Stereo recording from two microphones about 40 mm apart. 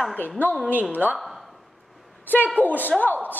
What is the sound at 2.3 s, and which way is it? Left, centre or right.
Speech, left.